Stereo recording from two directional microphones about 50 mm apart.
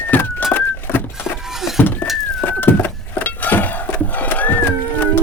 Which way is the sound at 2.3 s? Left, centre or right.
Left.